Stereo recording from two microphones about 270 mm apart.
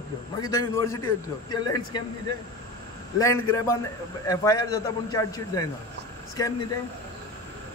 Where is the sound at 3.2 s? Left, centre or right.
Centre.